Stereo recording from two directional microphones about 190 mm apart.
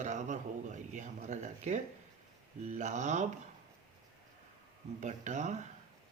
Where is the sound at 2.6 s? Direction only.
40° right (ahead or behind).